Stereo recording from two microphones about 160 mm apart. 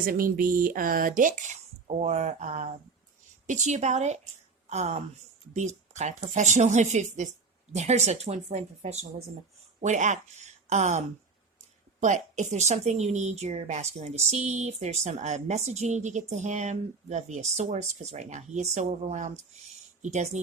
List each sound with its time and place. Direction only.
0.0 s a woman's voice: 65° right (ahead or behind); by 20.4 s 45° right (ahead or behind)